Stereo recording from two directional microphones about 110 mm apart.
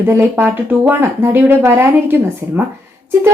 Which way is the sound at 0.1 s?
20° right (ahead or behind).